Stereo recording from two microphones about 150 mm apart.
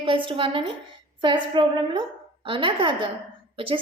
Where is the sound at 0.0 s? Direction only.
35° right (ahead or behind).